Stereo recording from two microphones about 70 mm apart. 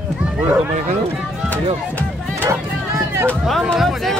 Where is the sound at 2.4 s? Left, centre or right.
Right.